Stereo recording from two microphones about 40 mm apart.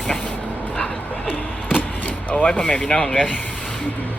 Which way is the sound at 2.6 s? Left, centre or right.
Left.